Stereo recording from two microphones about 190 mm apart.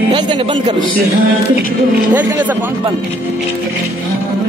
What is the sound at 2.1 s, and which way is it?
Speech, 10° right (ahead or behind).